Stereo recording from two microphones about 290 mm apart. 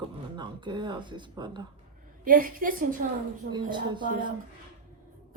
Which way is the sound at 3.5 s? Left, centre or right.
Centre.